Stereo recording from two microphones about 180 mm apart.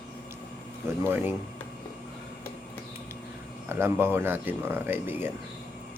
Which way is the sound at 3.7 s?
10° right (ahead or behind).